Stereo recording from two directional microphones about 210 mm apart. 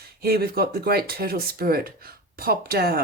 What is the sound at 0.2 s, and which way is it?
Speech, 45° right (ahead or behind).